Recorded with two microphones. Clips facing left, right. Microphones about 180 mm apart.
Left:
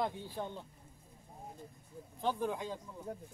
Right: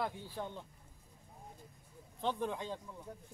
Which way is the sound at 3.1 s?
60° left (ahead or behind).